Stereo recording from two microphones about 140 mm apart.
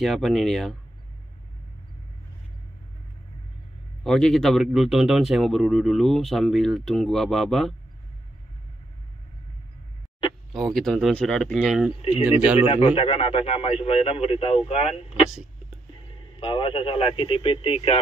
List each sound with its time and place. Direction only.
0.0 s speech: centre (ahead or behind)
4.0 s speech: centre (ahead or behind)
10.5 s speech: centre (ahead or behind)
12.5 s speech: 40° left (ahead or behind)
16.3 s speech: 40° left (ahead or behind)